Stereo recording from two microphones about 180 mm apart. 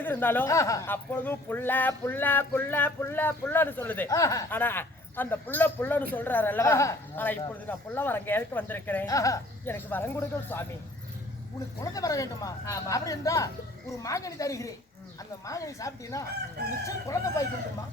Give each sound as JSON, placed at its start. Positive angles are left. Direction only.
{"t": 0.0, "sound": "speech", "side_deg": 10}
{"t": 11.8, "sound": "speech", "side_deg": 20}